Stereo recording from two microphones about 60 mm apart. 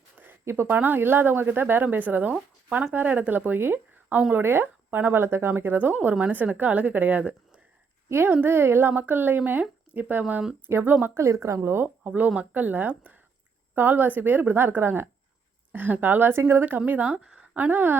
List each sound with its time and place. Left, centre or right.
0.2 s speech: right
10.7 s a woman's voice: right
11.2 s a woman's voice: right
12.4 s speech: right
16.3 s a woman's voice: right
16.6 s speech: right
17.2 s a sound: centre
17.5 s speech: right